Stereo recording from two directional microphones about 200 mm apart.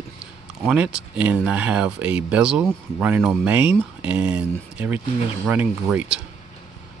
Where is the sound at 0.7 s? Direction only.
5° right (ahead or behind).